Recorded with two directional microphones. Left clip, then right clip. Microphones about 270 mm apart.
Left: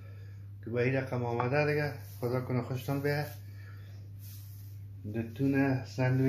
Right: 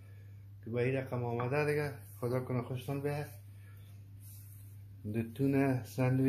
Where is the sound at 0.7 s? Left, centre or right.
Centre.